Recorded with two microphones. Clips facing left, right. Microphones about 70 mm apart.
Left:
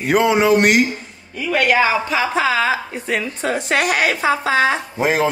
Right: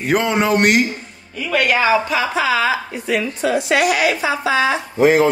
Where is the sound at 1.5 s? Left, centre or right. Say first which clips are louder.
Even; left.